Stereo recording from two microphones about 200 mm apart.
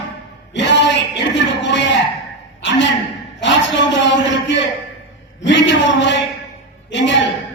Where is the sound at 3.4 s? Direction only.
65° left (ahead or behind).